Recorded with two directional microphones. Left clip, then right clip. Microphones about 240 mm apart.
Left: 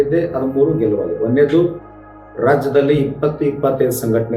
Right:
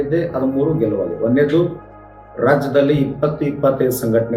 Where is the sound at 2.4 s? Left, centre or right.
Centre.